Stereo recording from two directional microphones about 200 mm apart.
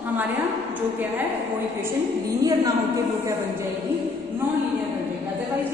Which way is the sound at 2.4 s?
20° right (ahead or behind).